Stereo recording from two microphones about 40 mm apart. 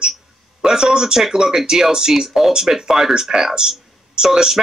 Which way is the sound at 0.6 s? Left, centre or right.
Centre.